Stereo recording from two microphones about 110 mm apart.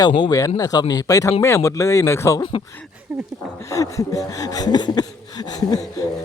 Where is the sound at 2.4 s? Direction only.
50° left (ahead or behind).